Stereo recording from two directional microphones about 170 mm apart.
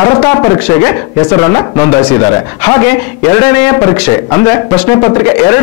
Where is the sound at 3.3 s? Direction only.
10° left (ahead or behind).